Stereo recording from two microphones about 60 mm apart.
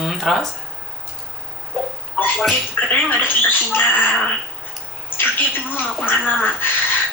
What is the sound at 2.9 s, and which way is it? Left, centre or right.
Speech, left.